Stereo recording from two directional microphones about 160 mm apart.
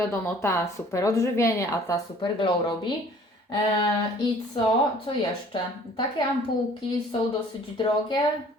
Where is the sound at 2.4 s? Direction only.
30° left (ahead or behind).